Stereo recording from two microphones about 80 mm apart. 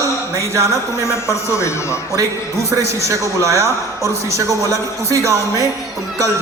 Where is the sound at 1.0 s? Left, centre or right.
Left.